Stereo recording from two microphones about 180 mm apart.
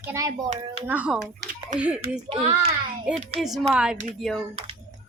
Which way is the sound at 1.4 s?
50° right (ahead or behind).